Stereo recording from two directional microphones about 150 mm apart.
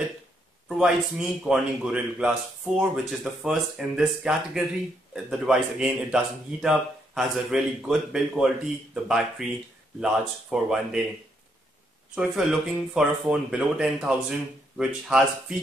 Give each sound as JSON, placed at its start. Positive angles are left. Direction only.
{"t": 0.7, "sound": "speech", "side_deg": -5}
{"t": 12.2, "sound": "speech", "side_deg": -5}